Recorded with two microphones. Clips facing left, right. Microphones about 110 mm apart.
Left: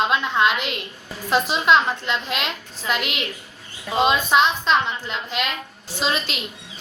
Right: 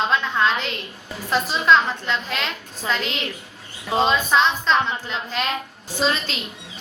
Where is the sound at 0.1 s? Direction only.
15° left (ahead or behind).